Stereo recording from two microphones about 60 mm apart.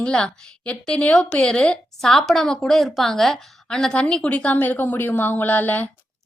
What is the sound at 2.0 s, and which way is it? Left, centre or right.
A woman's voice, centre.